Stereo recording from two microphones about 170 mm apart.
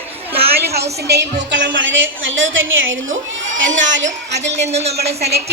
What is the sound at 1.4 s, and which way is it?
Speech, 90° right.